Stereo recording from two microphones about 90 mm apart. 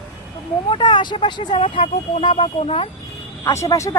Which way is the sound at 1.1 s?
65° left (ahead or behind).